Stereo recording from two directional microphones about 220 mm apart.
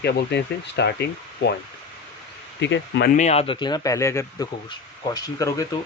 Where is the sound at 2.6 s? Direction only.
55° left (ahead or behind).